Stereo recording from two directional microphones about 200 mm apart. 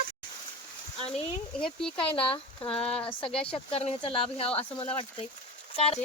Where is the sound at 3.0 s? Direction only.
25° left (ahead or behind).